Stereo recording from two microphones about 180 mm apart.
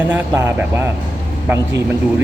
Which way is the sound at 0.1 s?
10° right (ahead or behind).